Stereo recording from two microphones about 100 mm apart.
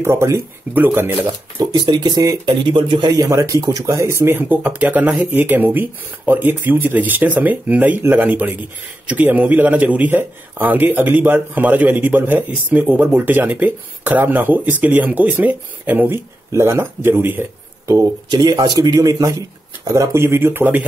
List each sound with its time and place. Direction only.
0.0 s speech: 30° right (ahead or behind)
1.6 s speech: 45° right (ahead or behind)
3.3 s speech: 30° right (ahead or behind)
17.9 s speech: 40° right (ahead or behind); by 20.8 s 20° right (ahead or behind)